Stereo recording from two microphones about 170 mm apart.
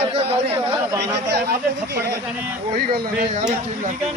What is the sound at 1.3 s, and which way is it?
Speech, 70° right (ahead or behind).